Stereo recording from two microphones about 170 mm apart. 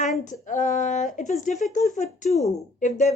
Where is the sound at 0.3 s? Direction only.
50° left (ahead or behind).